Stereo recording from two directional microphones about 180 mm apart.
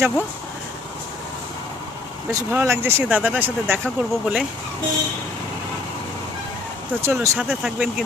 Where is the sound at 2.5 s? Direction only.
15° right (ahead or behind).